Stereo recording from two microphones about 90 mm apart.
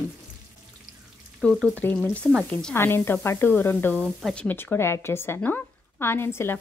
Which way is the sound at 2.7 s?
25° left (ahead or behind).